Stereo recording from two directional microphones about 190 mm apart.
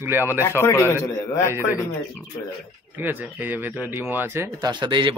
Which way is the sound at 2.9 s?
10° right (ahead or behind).